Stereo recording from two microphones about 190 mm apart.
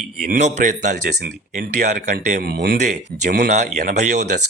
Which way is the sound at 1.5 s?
50° right (ahead or behind).